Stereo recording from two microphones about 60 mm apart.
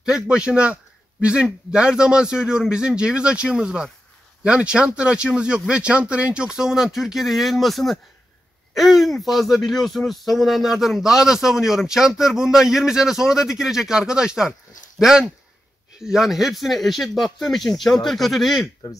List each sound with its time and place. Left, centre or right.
0.0 s speech: centre